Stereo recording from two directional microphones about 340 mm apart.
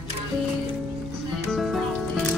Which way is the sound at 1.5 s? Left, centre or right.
Centre.